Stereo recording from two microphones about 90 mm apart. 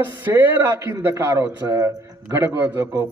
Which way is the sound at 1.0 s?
35° right (ahead or behind).